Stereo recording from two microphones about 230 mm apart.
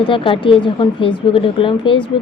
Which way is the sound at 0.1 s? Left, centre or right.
Left.